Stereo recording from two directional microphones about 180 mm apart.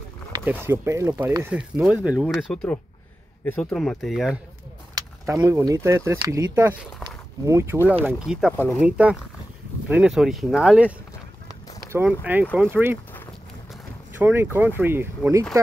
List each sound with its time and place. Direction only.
0.5 s speech: 15° right (ahead or behind)
3.4 s speech: 5° left (ahead or behind)
4.9 s speech: 20° right (ahead or behind)
8.1 s speech: 5° right (ahead or behind)
14.1 s speech: 15° right (ahead or behind)